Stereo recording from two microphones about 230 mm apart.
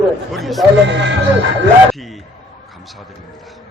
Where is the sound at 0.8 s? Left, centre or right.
Right.